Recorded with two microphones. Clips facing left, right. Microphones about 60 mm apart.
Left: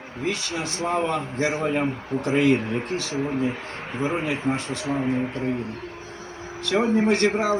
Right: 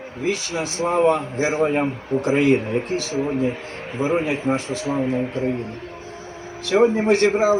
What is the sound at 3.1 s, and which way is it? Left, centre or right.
A man's voice, centre.